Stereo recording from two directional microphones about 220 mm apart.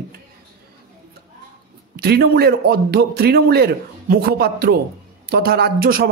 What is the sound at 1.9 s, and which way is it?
A man's voice, 45° right (ahead or behind).